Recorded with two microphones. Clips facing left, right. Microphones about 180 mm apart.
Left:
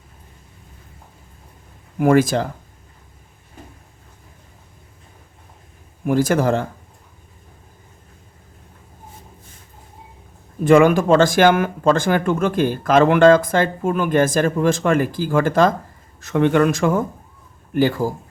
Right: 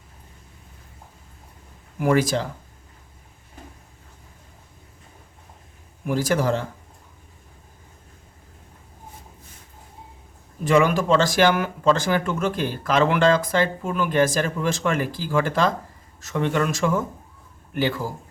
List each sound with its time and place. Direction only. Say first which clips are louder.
2.0 s speech: left 5 dB; 50° left (ahead or behind)
6.1 s speech: left 5 dB; 50° left (ahead or behind)
10.6 s speech: left 6 dB; 50° left (ahead or behind)
16.2 s speech: left 7 dB; 60° left (ahead or behind); by 18.1 s 45° left (ahead or behind)